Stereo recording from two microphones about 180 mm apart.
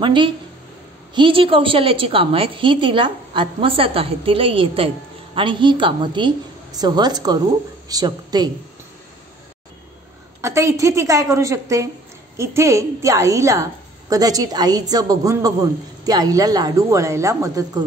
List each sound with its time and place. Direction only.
0.0 s a woman's voice: 25° right (ahead or behind)
10.4 s a woman's voice: 15° right (ahead or behind)